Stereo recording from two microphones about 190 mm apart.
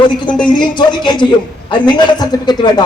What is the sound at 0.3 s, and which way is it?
Speech, 5° left (ahead or behind).